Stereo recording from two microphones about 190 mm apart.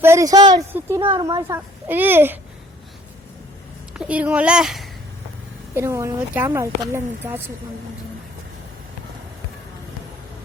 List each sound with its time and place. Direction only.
0.0 s a child's voice: 15° right (ahead or behind)
3.9 s speech: 5° right (ahead or behind)
5.7 s a child's voice: 15° right (ahead or behind)